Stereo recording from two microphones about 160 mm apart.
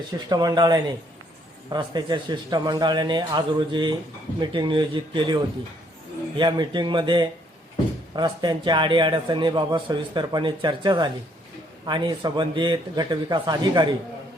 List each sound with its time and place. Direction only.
0.3 s a man's voice: 25° right (ahead or behind)